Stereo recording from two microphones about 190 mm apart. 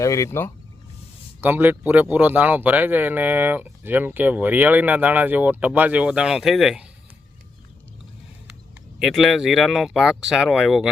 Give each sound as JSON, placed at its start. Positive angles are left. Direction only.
{"t": 0.0, "sound": "speech", "side_deg": 15}
{"t": 1.4, "sound": "speech", "side_deg": -10}
{"t": 9.0, "sound": "speech", "side_deg": 0}